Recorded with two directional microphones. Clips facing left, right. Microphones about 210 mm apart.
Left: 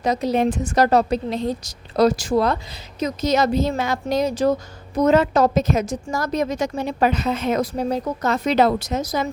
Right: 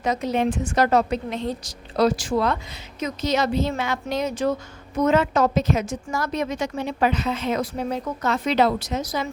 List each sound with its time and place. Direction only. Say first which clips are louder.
0.0 s a woman's voice: left 3 dB; 35° left (ahead or behind)